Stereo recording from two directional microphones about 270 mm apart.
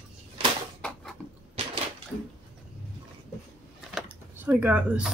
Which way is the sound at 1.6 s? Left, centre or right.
Right.